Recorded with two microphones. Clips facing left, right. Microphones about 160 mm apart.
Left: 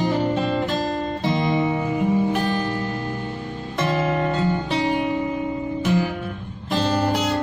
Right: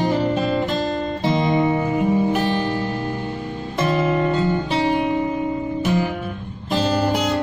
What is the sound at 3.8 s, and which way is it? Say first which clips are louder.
Music: right 3 dB; 20° right (ahead or behind).